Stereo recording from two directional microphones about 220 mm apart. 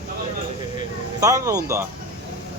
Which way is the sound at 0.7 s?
15° right (ahead or behind).